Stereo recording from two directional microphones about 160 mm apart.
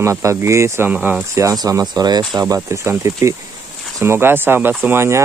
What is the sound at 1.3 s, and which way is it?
Speech, 20° right (ahead or behind).